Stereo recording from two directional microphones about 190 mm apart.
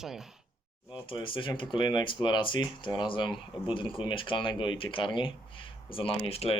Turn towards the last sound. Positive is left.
turn(degrees=30)  # may be behind; listen again after turning